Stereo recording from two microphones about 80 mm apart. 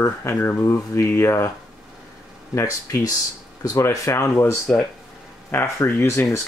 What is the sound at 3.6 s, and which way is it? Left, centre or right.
Speech, left.